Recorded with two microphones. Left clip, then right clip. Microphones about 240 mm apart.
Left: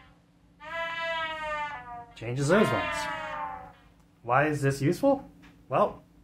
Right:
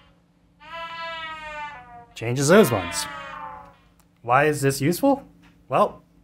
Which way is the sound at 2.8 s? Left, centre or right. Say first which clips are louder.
Right 1 dB; centre.